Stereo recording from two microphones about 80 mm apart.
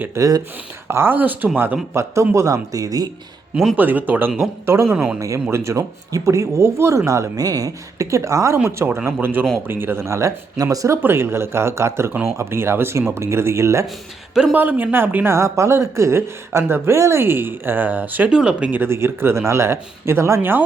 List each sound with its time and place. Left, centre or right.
0.2 s speech: right
0.9 s speech: right
3.5 s speech: centre
3.8 s speech: right
4.4 s speech: right
4.9 s speech: centre
5.2 s speech: right
11.0 s speech: right
14.5 s speech: right
18.7 s speech: right